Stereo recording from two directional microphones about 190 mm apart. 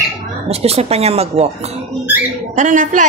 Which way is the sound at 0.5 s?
30° right (ahead or behind).